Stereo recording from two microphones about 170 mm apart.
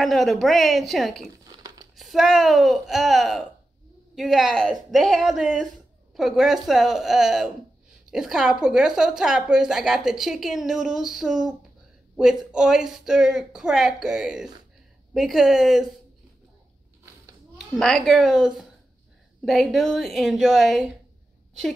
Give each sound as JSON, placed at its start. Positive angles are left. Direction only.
{"t": 0.0, "sound": "a woman's voice", "side_deg": 0}
{"t": 1.5, "sound": "crumpling", "side_deg": -25}
{"t": 2.0, "sound": "a woman's voice", "side_deg": 0}
{"t": 17.6, "sound": "a woman's voice", "side_deg": 5}